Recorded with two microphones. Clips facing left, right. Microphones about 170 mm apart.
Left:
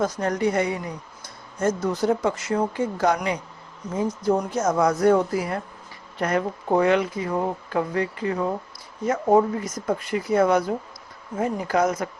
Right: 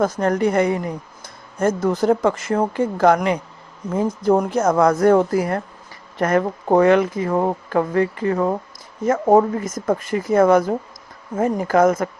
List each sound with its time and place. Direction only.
0.0 s a woman's voice: 55° right (ahead or behind)